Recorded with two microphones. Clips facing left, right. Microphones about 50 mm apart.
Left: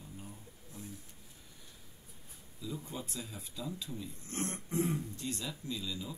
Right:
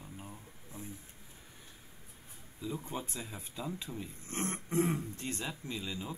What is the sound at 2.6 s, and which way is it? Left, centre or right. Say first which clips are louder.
Speech: right 3 dB; right.